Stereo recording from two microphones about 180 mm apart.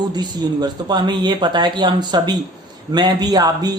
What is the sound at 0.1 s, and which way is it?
Speech, 25° right (ahead or behind).